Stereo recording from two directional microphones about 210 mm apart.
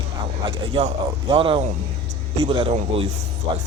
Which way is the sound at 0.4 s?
25° right (ahead or behind).